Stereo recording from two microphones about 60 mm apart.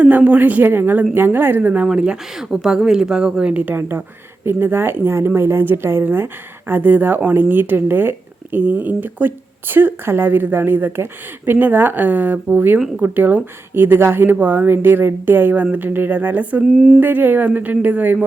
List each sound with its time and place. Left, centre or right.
0.0 s speech: right
1.9 s speech: centre
3.7 s speech: right